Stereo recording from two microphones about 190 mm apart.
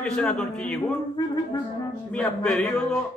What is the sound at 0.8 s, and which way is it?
Music, 20° left (ahead or behind).